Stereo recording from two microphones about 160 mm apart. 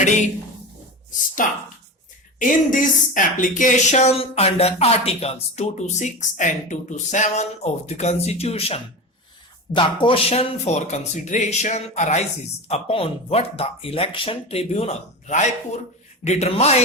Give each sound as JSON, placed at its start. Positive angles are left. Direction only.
{"t": 1.4, "sound": "speech", "side_deg": 55}